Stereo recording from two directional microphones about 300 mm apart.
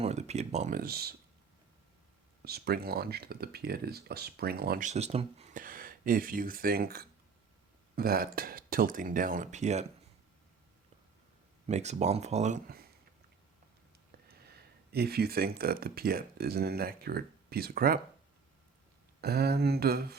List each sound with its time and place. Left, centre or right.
0.0 s speech: right
2.4 s speech: right
11.6 s speech: right
14.9 s speech: right
19.2 s speech: right